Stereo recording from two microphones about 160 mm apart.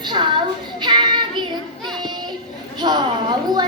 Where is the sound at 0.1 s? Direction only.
30° right (ahead or behind).